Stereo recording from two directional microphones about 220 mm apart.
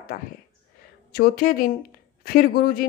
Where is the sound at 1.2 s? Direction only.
40° left (ahead or behind).